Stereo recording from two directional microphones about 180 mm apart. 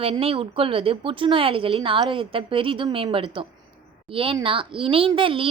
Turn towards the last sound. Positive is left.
turn(degrees=-30)  # may be behind; listen again after turning